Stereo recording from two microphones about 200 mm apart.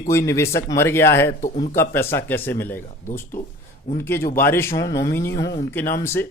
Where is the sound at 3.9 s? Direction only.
10° left (ahead or behind).